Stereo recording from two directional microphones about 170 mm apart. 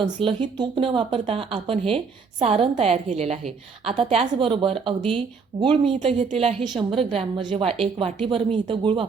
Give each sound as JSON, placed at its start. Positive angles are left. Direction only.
{"t": 0.0, "sound": "a woman's voice", "side_deg": -30}